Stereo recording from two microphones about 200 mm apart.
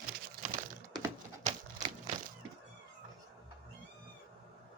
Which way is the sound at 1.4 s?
35° right (ahead or behind).